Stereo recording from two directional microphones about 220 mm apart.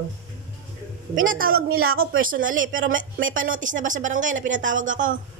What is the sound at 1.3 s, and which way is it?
A woman's voice, 40° right (ahead or behind).